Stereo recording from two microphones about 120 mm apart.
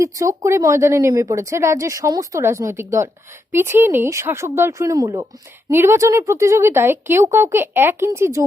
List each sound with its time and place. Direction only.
0.0 s speech: 25° right (ahead or behind)
5.7 s speech: 20° right (ahead or behind)